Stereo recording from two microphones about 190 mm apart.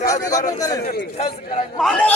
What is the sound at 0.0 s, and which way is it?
Speech, 20° left (ahead or behind).